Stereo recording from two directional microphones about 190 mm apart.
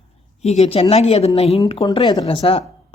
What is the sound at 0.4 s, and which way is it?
Speech, 35° left (ahead or behind).